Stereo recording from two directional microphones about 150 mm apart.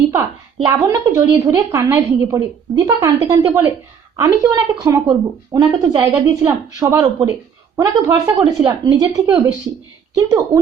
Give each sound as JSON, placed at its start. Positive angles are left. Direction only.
{"t": 0.6, "sound": "a woman's voice", "side_deg": -20}